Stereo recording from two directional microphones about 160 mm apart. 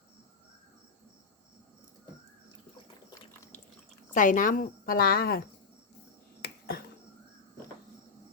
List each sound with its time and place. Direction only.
4.1 s a woman's voice: 55° left (ahead or behind)
6.4 s finger snapping: 70° left (ahead or behind)